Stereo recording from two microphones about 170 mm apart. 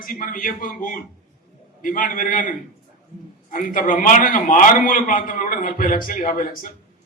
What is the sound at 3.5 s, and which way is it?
A man's voice, 50° left (ahead or behind).